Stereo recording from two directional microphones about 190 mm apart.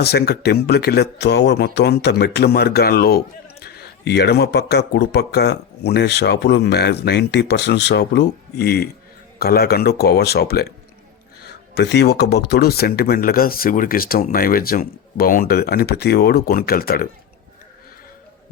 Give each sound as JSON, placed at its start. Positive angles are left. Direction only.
{"t": 0.0, "sound": "speech", "side_deg": 55}
{"t": 11.7, "sound": "speech", "side_deg": 65}